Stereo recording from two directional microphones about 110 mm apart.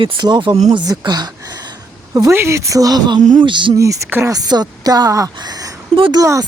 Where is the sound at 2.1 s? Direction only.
30° right (ahead or behind); by 3.7 s 45° right (ahead or behind).